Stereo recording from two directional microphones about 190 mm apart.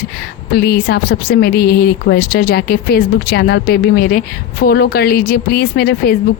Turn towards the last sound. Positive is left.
turn(degrees=55)  # may be behind; listen again after turning